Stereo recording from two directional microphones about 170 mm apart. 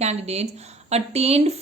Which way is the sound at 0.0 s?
40° right (ahead or behind).